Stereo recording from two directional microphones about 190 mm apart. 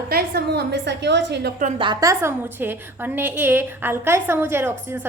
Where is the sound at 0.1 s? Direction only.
55° right (ahead or behind).